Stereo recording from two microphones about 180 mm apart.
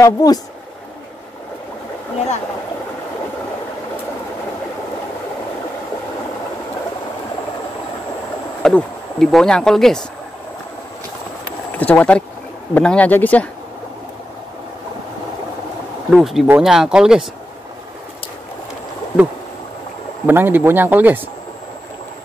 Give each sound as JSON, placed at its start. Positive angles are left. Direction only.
{"t": 0.0, "sound": "speech", "side_deg": 20}
{"t": 8.6, "sound": "speech", "side_deg": 5}
{"t": 11.8, "sound": "speech", "side_deg": 5}
{"t": 16.1, "sound": "speech", "side_deg": 0}
{"t": 20.2, "sound": "speech", "side_deg": -10}